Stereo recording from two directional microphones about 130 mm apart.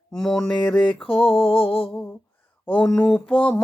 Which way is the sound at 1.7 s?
45° left (ahead or behind).